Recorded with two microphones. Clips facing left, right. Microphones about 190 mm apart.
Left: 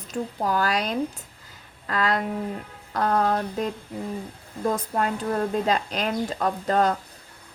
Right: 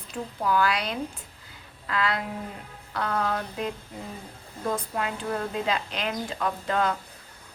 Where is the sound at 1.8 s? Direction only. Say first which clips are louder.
Left 3 dB; 40° left (ahead or behind).